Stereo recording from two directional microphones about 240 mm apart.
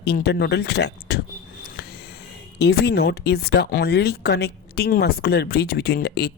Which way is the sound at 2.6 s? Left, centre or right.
Left.